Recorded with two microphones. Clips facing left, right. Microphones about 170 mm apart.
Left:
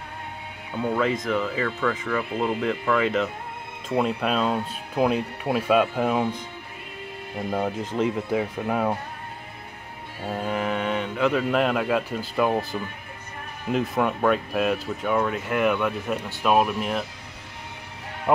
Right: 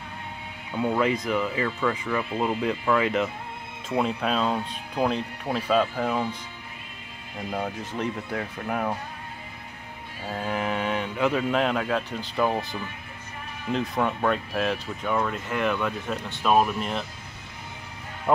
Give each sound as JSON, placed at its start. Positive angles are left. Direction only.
{"t": 1.2, "sound": "speech", "side_deg": -5}
{"t": 7.6, "sound": "speech", "side_deg": 20}
{"t": 10.3, "sound": "speech", "side_deg": 0}
{"t": 13.7, "sound": "speech", "side_deg": 5}